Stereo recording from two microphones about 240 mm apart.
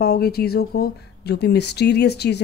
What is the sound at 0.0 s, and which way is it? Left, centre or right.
Speech, left.